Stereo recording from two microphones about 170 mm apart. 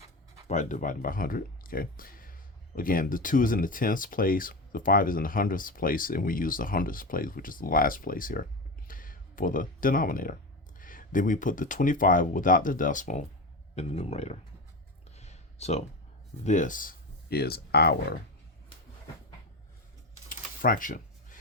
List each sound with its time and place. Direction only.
0.4 s speech: 45° left (ahead or behind)
13.7 s speech: 35° left (ahead or behind)
15.1 s a sound: 40° left (ahead or behind)
16.4 s speech: 45° left (ahead or behind); by 18.2 s 70° left (ahead or behind)
20.6 s speech: 55° left (ahead or behind)